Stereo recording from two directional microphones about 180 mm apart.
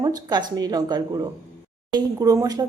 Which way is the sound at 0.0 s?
20° right (ahead or behind).